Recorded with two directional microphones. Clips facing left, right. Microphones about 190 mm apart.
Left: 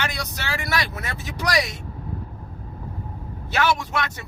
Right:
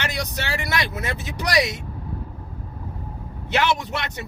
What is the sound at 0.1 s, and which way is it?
Speech, 20° right (ahead or behind).